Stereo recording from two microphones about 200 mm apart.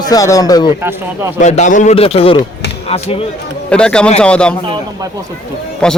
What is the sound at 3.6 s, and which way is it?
Speech, 5° left (ahead or behind).